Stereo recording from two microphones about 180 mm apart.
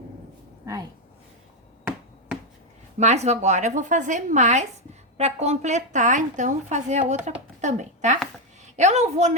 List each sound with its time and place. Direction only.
0.6 s speech: 20° right (ahead or behind)
3.0 s a woman's voice: 40° right (ahead or behind)